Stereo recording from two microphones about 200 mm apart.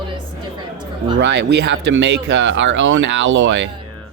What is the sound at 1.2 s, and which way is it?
Speech, 60° right (ahead or behind).